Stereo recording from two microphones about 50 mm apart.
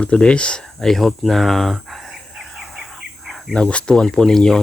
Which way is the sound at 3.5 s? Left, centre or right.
Left.